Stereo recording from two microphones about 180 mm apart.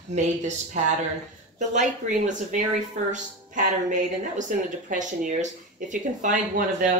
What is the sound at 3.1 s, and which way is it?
Speech, 45° right (ahead or behind).